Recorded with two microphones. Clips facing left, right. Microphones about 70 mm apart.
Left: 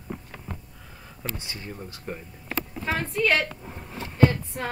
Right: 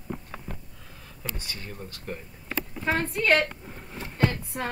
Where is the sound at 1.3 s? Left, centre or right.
Left.